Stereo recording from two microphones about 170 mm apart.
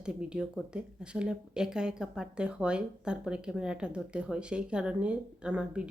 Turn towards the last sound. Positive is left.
turn(degrees=-5)  # may be behind; listen again after turning